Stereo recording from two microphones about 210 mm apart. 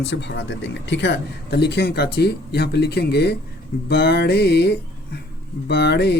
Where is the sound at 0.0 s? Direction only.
55° left (ahead or behind).